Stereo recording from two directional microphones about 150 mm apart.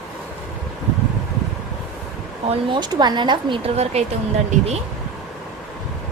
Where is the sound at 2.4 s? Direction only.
30° right (ahead or behind).